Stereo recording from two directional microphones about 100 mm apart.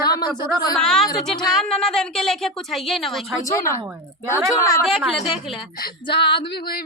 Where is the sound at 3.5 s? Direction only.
30° left (ahead or behind).